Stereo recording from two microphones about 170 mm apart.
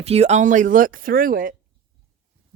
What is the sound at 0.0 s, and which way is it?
Speech, 40° right (ahead or behind).